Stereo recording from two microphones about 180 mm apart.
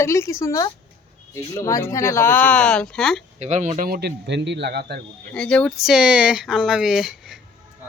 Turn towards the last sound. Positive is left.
turn(degrees=0)  # may be behind; listen again after turning